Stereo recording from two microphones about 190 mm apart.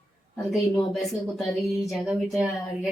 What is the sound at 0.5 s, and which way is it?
A woman's voice, centre (ahead or behind).